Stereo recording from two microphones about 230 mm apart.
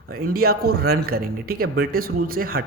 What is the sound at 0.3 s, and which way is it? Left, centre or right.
A man's voice, right.